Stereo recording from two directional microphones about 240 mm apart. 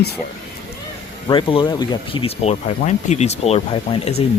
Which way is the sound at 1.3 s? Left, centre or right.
Centre.